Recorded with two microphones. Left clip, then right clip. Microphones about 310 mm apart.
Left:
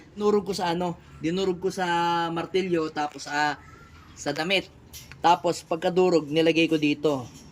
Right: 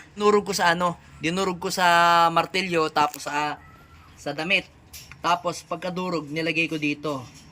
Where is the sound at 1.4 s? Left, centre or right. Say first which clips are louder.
Right 3 dB; right.